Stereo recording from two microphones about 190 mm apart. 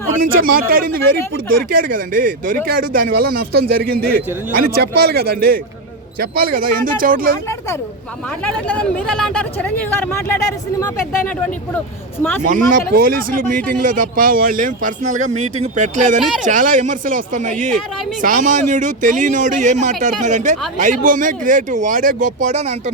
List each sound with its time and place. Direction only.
0.2 s a man's voice: 50° right (ahead or behind)
8.4 s speech: 5° left (ahead or behind)
12.9 s a man's voice: 50° right (ahead or behind)